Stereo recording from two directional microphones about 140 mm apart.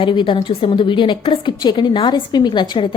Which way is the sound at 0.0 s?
35° left (ahead or behind).